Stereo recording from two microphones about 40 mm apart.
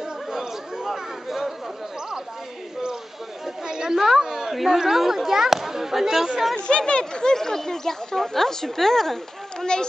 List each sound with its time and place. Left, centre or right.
0.3 s chatter: centre
3.6 s a sound: centre
4.6 s speech: centre
6.5 s speech: left